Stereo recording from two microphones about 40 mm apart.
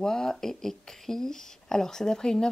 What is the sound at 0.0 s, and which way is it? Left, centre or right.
Speech, centre.